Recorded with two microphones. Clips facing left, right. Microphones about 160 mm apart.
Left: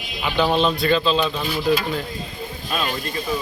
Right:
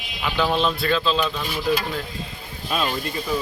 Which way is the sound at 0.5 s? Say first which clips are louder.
Left 4 dB; centre (ahead or behind).